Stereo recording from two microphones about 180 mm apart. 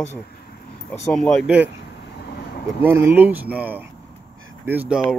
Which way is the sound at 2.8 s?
10° right (ahead or behind).